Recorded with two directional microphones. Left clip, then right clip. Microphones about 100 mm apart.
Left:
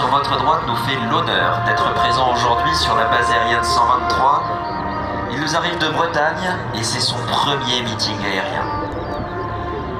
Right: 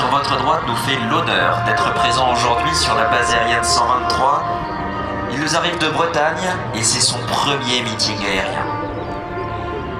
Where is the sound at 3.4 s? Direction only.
65° right (ahead or behind).